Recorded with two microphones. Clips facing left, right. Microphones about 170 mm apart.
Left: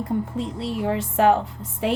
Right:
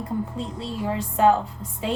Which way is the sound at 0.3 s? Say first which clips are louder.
Left 3 dB; 75° left (ahead or behind).